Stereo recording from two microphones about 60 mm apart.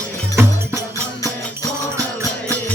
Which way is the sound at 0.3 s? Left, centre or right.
Right.